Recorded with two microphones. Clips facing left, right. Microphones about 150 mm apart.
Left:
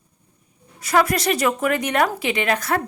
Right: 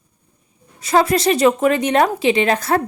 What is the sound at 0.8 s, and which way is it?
A woman's voice, 25° right (ahead or behind).